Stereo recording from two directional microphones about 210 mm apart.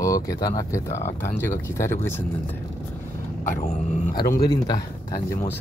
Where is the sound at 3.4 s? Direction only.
40° left (ahead or behind).